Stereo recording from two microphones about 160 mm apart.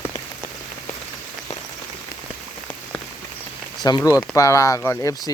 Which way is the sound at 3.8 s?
25° left (ahead or behind).